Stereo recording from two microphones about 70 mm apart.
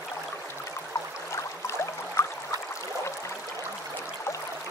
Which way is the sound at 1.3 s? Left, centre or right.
Left.